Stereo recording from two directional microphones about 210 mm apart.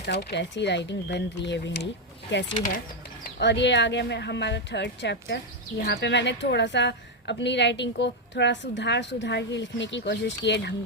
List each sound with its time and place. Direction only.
0.0 s a woman's voice: 55° left (ahead or behind)
3.2 s a woman's voice: 50° left (ahead or behind)